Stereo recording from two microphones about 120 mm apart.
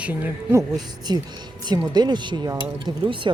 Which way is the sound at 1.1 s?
35° right (ahead or behind).